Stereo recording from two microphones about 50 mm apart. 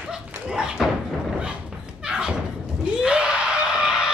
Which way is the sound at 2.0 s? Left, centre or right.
Right.